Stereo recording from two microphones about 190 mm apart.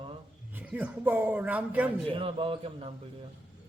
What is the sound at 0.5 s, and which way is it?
A man's voice, 10° right (ahead or behind).